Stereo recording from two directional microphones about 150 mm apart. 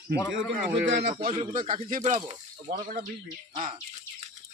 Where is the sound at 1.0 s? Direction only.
90° right.